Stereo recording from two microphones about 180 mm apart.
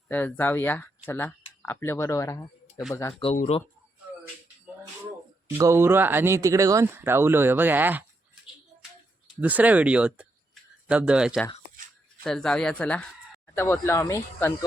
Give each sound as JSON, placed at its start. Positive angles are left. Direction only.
{"t": 0.1, "sound": "speech", "side_deg": 10}
{"t": 3.3, "sound": "speech", "side_deg": 40}
{"t": 5.5, "sound": "speech", "side_deg": -15}
{"t": 9.4, "sound": "speech", "side_deg": -10}